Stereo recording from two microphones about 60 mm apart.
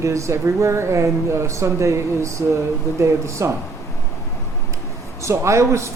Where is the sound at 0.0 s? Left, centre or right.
Right.